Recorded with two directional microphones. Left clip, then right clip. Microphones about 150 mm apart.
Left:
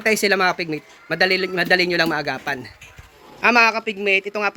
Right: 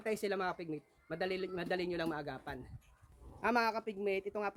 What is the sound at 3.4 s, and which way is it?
A man's voice, 20° right (ahead or behind).